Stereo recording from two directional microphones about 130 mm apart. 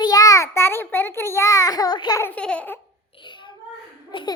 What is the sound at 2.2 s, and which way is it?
Speech, 10° left (ahead or behind).